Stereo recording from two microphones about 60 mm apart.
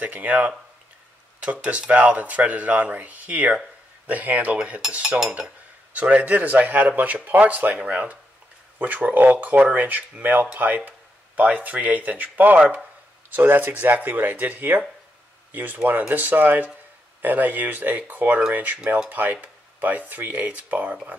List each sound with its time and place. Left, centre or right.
0.0 s speech: right
5.0 s cutlery: centre
5.9 s speech: right
13.3 s speech: right